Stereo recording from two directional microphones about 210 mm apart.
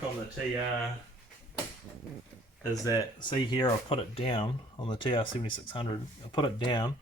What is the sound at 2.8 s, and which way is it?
Speech, 20° left (ahead or behind).